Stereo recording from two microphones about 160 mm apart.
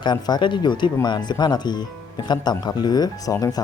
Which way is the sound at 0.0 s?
25° left (ahead or behind).